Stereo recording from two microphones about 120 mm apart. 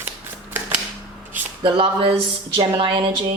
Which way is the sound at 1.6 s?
50° right (ahead or behind).